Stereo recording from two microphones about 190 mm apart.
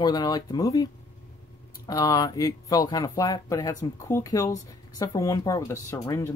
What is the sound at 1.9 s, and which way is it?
Speech, 20° left (ahead or behind).